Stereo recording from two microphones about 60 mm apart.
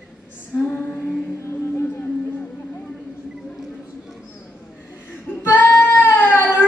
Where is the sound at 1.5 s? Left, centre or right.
Left.